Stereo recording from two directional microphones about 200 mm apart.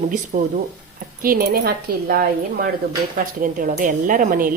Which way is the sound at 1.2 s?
50° right (ahead or behind).